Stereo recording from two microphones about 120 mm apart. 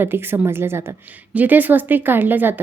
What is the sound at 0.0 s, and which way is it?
A woman's voice, 20° right (ahead or behind).